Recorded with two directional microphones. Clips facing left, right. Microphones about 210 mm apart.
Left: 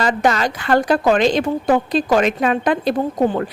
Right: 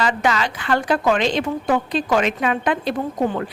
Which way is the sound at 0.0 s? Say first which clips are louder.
Left 3 dB; 40° left (ahead or behind).